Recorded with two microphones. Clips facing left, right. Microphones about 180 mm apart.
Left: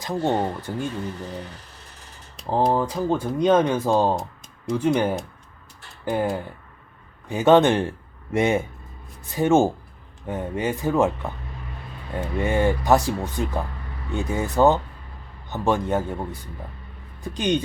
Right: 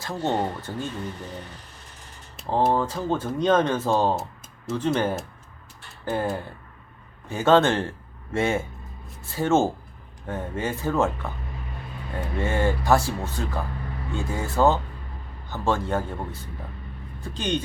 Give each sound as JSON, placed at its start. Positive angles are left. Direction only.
{"t": 0.0, "sound": "speech", "side_deg": 15}
{"t": 2.7, "sound": "speech", "side_deg": 15}
{"t": 4.1, "sound": "a sound", "side_deg": -5}
{"t": 4.7, "sound": "speech", "side_deg": 15}